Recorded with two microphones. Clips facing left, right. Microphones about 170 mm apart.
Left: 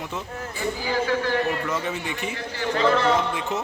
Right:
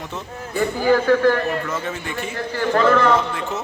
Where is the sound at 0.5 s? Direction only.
55° right (ahead or behind).